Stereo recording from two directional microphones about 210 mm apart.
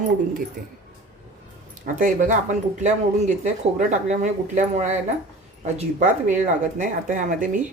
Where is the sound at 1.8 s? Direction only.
40° right (ahead or behind).